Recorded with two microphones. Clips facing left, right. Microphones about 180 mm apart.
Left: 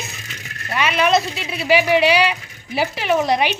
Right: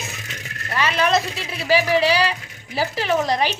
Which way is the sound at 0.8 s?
15° left (ahead or behind).